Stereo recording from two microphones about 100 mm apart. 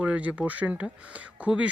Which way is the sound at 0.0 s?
15° right (ahead or behind).